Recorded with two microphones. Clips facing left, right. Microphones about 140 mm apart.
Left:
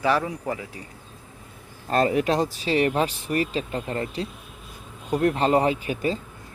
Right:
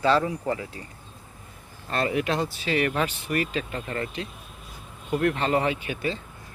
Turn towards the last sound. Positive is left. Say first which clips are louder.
# left 3 dB
turn(degrees=40)  # may be behind; listen again after turning